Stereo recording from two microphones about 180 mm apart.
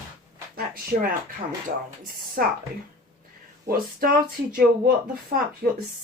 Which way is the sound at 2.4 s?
55° right (ahead or behind).